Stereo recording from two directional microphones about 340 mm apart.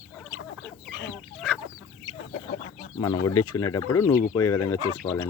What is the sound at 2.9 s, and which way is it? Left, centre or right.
Speech, centre.